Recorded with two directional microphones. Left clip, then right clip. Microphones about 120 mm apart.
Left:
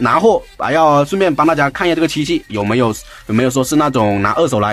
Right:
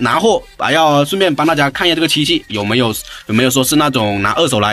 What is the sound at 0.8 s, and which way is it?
Speech, 40° left (ahead or behind).